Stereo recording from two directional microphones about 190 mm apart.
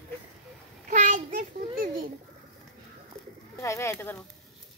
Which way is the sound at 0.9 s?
45° right (ahead or behind).